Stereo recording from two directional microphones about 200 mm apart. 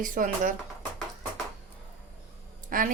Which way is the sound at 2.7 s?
45° right (ahead or behind).